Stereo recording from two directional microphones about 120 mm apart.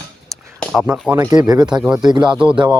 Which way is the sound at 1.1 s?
30° right (ahead or behind).